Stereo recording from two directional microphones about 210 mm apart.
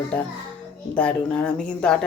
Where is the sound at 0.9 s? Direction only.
5° left (ahead or behind).